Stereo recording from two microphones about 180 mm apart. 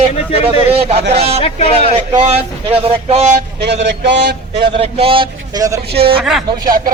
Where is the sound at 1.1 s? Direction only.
35° right (ahead or behind).